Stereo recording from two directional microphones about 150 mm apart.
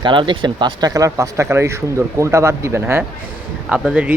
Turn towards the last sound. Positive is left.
turn(degrees=-5)  # may be behind; listen again after turning